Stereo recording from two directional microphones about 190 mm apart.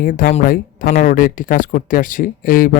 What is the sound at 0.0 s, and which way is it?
Speech, 45° left (ahead or behind).